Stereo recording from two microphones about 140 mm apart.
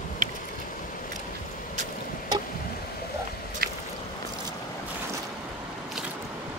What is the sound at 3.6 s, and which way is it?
Boat, 90° right.